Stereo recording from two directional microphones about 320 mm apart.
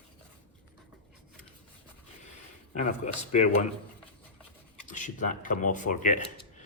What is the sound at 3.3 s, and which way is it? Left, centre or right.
Speech, left.